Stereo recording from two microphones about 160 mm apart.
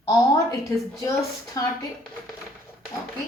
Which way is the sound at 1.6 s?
25° left (ahead or behind).